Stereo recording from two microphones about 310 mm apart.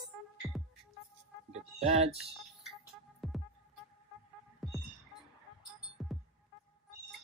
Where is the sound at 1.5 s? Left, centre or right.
Centre.